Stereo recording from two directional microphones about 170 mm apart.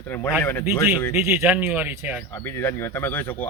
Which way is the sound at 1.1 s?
10° right (ahead or behind).